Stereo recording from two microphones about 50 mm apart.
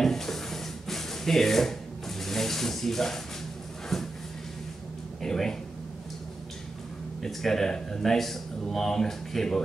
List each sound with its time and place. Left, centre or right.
0.0 s a sound: centre
5.2 s speech: centre
7.2 s speech: centre